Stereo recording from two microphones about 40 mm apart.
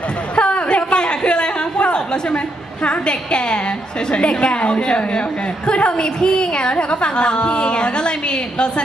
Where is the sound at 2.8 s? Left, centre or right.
Left.